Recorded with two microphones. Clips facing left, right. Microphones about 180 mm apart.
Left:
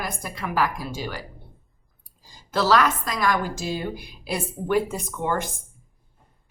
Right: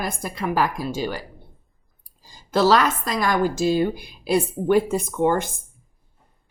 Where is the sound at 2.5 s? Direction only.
30° right (ahead or behind).